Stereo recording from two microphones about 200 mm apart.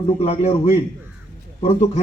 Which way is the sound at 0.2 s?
30° left (ahead or behind).